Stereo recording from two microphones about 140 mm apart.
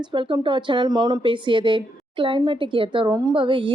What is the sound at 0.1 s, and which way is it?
Speech, 35° right (ahead or behind).